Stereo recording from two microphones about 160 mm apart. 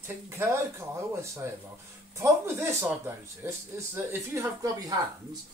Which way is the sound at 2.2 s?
15° right (ahead or behind).